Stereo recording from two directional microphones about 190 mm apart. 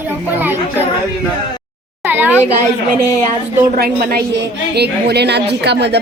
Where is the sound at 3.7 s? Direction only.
55° right (ahead or behind).